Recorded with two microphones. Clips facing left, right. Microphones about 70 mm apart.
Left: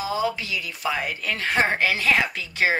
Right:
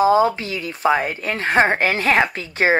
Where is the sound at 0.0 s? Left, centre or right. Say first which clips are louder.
Right 10 dB; right.